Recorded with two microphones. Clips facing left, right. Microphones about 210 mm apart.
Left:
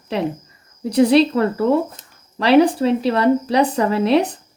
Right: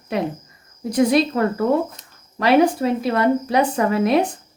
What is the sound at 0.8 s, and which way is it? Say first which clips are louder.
Speech: left 3 dB; 30° left (ahead or behind).